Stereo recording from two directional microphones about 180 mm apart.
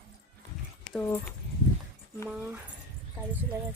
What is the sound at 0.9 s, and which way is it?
Speech, 10° left (ahead or behind).